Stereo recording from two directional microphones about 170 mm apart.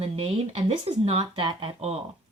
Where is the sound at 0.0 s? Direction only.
35° right (ahead or behind).